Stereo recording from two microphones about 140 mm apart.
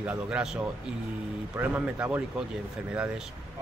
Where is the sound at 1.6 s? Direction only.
10° right (ahead or behind).